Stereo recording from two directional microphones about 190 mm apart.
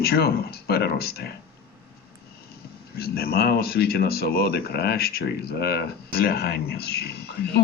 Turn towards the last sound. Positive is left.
turn(degrees=55)  # may be behind; listen again after turning